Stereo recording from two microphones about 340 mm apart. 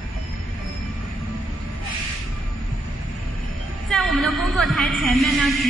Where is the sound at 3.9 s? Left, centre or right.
Centre.